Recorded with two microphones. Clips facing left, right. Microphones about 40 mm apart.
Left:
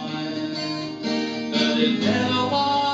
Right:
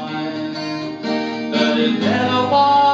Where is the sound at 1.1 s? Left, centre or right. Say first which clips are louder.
Right 5 dB; centre.